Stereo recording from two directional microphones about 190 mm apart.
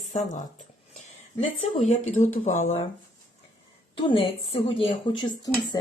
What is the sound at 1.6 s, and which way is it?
Speech, 40° left (ahead or behind).